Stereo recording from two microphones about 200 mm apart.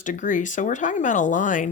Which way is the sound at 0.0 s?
40° left (ahead or behind).